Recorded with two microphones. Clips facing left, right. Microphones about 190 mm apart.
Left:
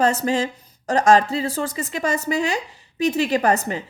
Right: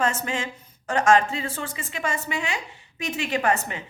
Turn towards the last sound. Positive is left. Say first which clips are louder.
# left 4 dB
turn(degrees=35)  # may be behind; listen again after turning